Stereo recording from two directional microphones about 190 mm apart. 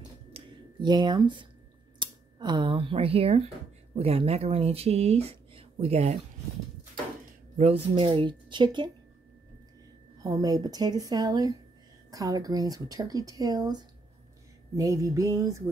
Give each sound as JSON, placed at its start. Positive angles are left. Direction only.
{"t": 0.3, "sound": "a sound", "side_deg": -25}
{"t": 2.0, "sound": "speech", "side_deg": -25}
{"t": 7.5, "sound": "speech", "side_deg": -30}
{"t": 10.2, "sound": "speech", "side_deg": -20}
{"t": 14.8, "sound": "music", "side_deg": -15}